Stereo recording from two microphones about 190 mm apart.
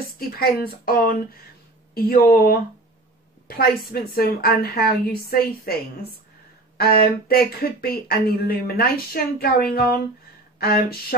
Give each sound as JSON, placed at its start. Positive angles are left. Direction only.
{"t": 0.4, "sound": "speech", "side_deg": 50}
{"t": 6.8, "sound": "speech", "side_deg": 55}